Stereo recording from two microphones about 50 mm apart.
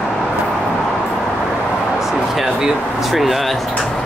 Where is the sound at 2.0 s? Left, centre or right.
Centre.